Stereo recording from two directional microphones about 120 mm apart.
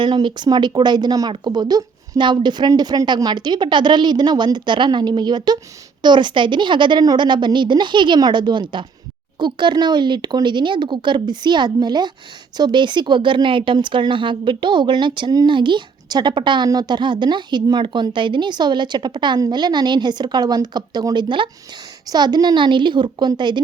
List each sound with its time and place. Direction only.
0.0 s a woman's voice: 40° right (ahead or behind)